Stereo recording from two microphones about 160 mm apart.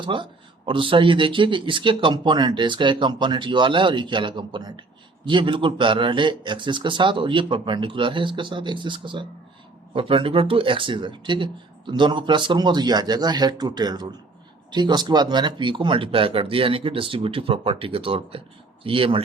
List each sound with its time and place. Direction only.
0.0 s a man's voice: 30° right (ahead or behind)